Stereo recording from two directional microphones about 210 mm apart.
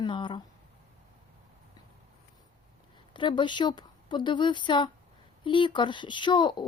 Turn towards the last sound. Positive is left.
turn(degrees=20)  # may be behind; listen again after turning